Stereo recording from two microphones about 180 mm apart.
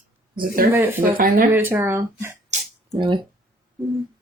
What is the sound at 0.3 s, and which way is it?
Speech, 55° right (ahead or behind).